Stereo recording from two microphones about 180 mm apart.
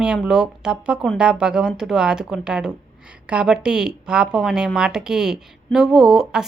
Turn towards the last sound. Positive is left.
turn(degrees=-5)  # may be behind; listen again after turning